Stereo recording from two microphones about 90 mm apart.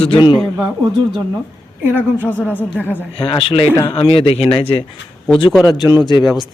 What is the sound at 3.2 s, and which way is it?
A man's voice, 80° left.